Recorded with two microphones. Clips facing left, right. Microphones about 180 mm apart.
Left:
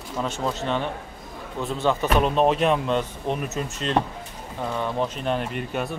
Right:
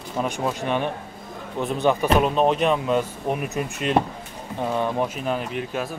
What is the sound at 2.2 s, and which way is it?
Speech, centre (ahead or behind).